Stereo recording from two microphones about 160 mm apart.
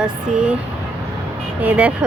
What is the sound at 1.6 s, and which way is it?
Speech, 10° right (ahead or behind).